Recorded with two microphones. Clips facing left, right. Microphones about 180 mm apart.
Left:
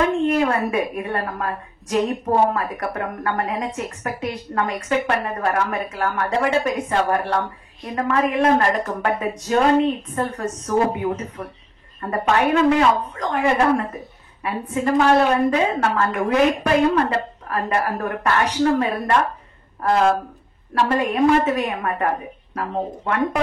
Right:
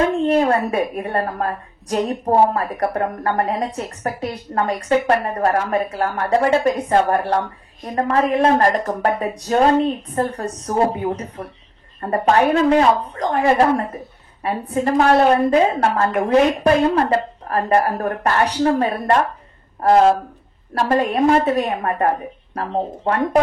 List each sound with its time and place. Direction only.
0.2 s a woman's voice: 35° right (ahead or behind)